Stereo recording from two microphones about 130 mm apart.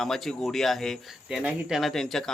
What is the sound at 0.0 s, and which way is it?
Speech, centre (ahead or behind).